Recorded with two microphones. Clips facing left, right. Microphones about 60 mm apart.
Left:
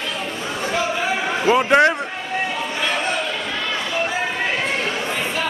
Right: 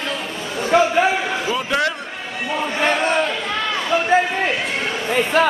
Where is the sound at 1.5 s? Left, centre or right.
Left.